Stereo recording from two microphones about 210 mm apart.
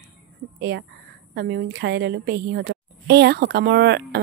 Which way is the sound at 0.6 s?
55° right (ahead or behind).